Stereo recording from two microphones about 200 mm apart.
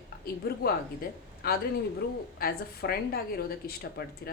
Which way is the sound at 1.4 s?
50° left (ahead or behind).